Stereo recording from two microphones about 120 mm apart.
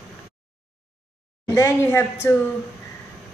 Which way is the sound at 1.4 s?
25° left (ahead or behind).